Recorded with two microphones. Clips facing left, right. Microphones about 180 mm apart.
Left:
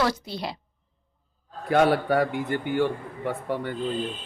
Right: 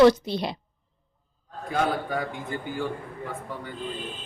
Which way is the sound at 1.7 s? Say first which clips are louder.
Left 6 dB; 70° left (ahead or behind).